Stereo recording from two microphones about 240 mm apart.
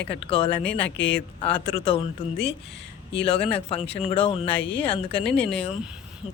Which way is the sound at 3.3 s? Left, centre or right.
Left.